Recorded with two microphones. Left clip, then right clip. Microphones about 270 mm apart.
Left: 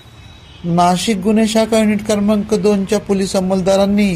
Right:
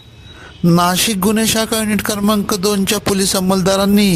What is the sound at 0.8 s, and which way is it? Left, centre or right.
Speech, right.